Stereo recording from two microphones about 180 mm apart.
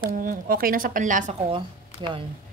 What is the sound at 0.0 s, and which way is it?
Speech, 50° right (ahead or behind).